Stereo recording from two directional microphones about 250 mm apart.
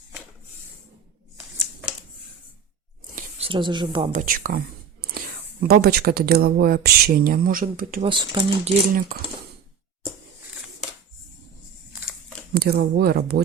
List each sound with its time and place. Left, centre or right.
1.5 s shuffling cards: centre
3.2 s speech: right
5.6 s speech: right
8.0 s speech: centre
12.5 s speech: right